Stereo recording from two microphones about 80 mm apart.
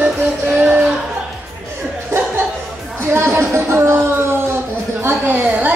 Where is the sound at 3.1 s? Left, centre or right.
Right.